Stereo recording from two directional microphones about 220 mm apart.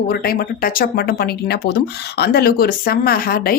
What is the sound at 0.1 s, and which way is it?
A woman's voice, 45° left (ahead or behind).